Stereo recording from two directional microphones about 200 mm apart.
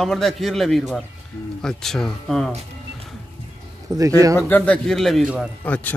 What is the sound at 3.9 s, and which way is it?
Speech, 15° right (ahead or behind).